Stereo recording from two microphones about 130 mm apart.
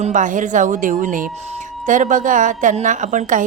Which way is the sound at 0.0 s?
75° right (ahead or behind).